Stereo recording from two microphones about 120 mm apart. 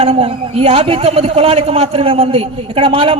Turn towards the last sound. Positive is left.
turn(degrees=-50)  # may be behind; listen again after turning